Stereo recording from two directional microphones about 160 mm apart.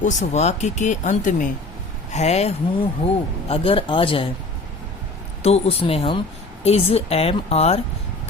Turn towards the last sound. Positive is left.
turn(degrees=40)  # may be behind; listen again after turning